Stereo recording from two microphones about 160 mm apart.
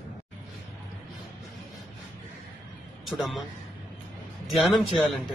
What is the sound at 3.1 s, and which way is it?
Speech, centre (ahead or behind).